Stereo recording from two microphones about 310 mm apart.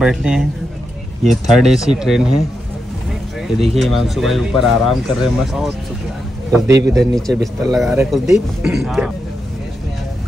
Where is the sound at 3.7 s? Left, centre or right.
Centre.